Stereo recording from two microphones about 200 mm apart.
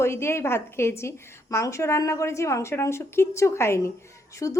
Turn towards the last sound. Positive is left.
turn(degrees=15)  # may be behind; listen again after turning